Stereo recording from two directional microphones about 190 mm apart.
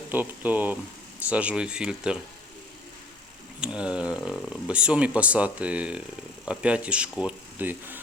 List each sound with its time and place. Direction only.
0.1 s speech: 10° right (ahead or behind)
3.6 s speech: 5° right (ahead or behind)